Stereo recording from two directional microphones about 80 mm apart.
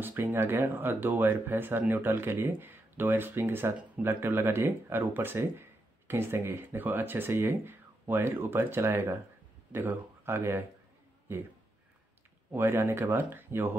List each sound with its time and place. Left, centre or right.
0.0 s speech: right
12.5 s speech: right